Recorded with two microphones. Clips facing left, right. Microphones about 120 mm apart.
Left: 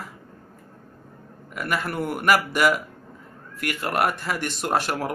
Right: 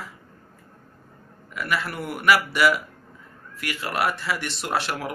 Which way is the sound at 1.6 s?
45° left (ahead or behind).